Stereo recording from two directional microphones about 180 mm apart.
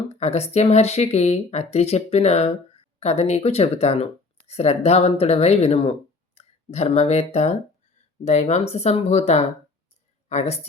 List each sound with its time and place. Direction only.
0.2 s speech: 35° left (ahead or behind)